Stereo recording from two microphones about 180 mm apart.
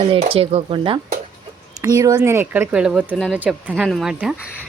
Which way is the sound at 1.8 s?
20° right (ahead or behind).